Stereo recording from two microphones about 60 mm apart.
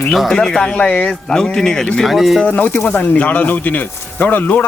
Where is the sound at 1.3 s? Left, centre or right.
Centre.